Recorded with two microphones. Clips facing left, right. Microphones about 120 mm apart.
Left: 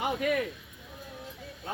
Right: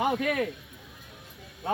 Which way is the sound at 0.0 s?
80° right.